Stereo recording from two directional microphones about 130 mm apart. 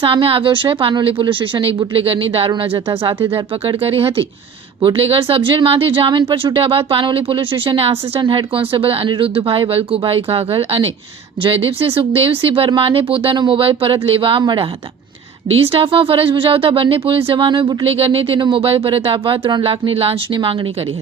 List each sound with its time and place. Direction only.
0.0 s speech: 45° right (ahead or behind)